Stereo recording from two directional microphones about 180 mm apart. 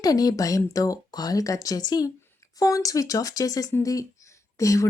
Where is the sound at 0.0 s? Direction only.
20° left (ahead or behind).